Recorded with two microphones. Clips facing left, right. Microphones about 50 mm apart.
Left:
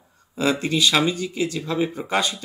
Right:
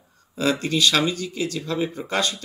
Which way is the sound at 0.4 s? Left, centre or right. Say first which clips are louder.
Left 1 dB; centre.